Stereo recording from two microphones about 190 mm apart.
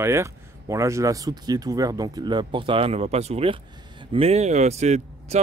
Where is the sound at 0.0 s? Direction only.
15° right (ahead or behind).